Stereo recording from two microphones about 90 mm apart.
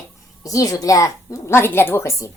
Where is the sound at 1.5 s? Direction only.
25° left (ahead or behind).